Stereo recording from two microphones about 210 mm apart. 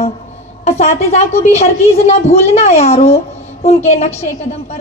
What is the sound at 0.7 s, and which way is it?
A woman's voice, 30° left (ahead or behind).